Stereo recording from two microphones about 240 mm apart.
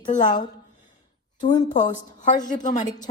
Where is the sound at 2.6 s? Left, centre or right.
Left.